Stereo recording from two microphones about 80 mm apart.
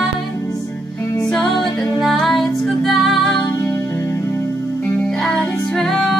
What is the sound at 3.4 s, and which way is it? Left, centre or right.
Music, left.